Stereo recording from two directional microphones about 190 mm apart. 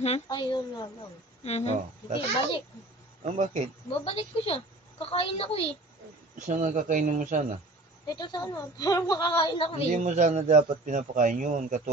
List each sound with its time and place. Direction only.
0.3 s a woman's voice: 20° left (ahead or behind)
1.4 s speech: 35° left (ahead or behind)
3.3 s a man's voice: 40° right (ahead or behind)
3.9 s a woman's voice: 30° left (ahead or behind)
6.3 s speech: 40° right (ahead or behind)
8.1 s a woman's voice: 20° left (ahead or behind)
9.9 s a man's voice: 40° right (ahead or behind)